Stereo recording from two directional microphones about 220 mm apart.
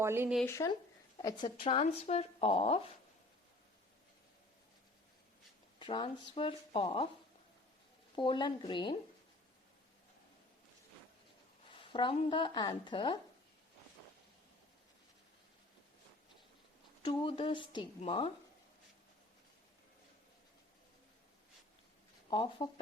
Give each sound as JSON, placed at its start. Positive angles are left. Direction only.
{"t": 0.0, "sound": "speech", "side_deg": -10}
{"t": 0.4, "sound": "speech", "side_deg": 15}
{"t": 5.8, "sound": "speech", "side_deg": 20}
{"t": 8.1, "sound": "speech", "side_deg": 20}
{"t": 11.7, "sound": "speech", "side_deg": 25}
{"t": 17.0, "sound": "speech", "side_deg": 20}
{"t": 22.3, "sound": "speech", "side_deg": 25}